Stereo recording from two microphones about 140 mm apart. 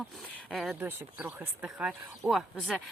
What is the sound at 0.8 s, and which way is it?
Speech, 15° right (ahead or behind).